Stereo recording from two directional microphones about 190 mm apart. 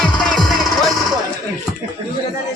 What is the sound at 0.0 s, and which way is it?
Music, 5° left (ahead or behind).